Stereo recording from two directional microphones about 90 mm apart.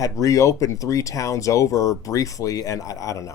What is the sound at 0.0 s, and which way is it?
Speech, 40° left (ahead or behind).